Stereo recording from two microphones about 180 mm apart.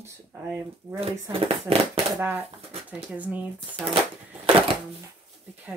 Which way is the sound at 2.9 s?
10° right (ahead or behind).